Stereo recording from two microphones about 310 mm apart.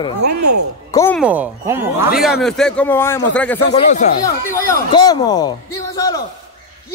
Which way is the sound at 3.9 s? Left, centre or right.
Left.